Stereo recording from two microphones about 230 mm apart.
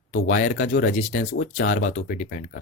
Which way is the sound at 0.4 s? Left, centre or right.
Left.